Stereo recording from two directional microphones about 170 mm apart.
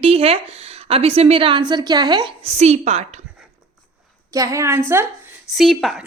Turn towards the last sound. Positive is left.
turn(degrees=0)  # may be behind; listen again after turning